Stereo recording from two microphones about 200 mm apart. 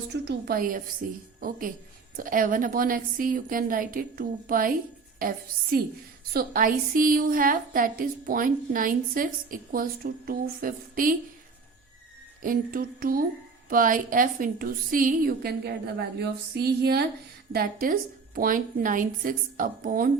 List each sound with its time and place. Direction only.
0.1 s a woman's voice: 50° right (ahead or behind)
5.7 s a woman's voice: 50° right (ahead or behind)
12.4 s a woman's voice: 45° right (ahead or behind)